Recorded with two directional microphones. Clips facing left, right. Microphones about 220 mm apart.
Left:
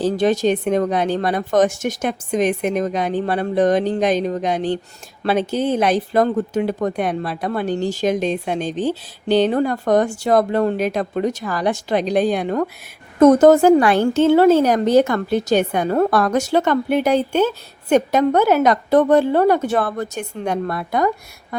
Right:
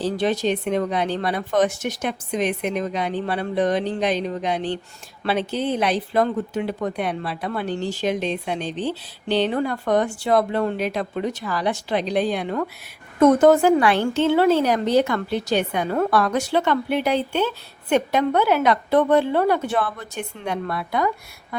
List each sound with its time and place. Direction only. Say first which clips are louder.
0.0 s a woman's voice: left 5 dB; 45° left (ahead or behind)